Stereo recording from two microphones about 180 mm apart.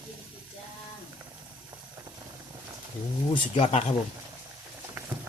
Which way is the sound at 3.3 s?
30° left (ahead or behind).